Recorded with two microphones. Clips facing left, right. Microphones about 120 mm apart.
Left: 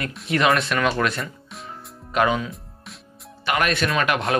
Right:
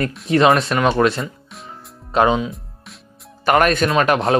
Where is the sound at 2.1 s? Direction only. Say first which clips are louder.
Right 5 dB; 30° right (ahead or behind).